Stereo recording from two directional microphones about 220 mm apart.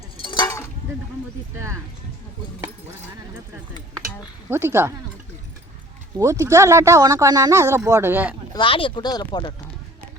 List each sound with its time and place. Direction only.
0.2 s a sound: 20° left (ahead or behind)
4.4 s speech: 10° right (ahead or behind)
6.1 s speech: 15° right (ahead or behind)
8.5 s speech: 25° left (ahead or behind)